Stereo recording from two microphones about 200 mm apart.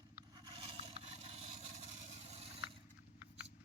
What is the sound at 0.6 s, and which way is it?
Vehicle, 30° right (ahead or behind).